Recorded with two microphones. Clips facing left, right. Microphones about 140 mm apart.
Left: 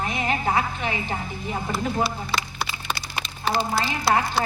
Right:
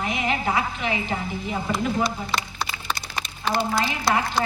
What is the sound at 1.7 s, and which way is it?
Speech, 5° left (ahead or behind).